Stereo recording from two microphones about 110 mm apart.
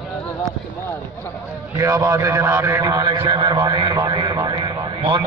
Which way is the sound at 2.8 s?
40° right (ahead or behind).